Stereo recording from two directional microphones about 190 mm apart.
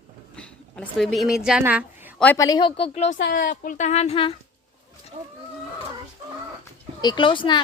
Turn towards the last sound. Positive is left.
turn(degrees=25)  # may be behind; listen again after turning